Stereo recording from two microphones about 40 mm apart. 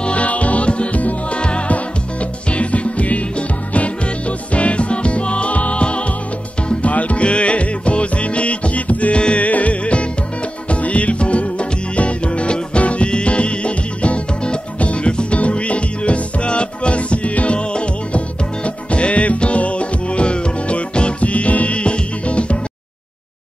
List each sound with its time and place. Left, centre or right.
0.0 s music: left